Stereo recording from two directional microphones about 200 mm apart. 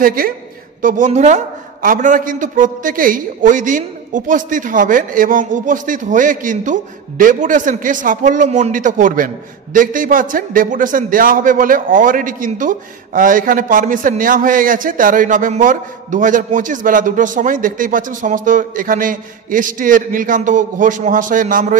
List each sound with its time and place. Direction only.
0.0 s a man's voice: 45° right (ahead or behind)